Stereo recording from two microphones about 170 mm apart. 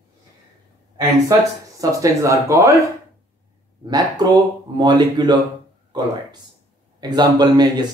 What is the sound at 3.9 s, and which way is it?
Speech, 25° right (ahead or behind).